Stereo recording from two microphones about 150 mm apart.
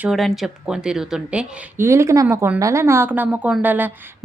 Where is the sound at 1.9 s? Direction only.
20° right (ahead or behind).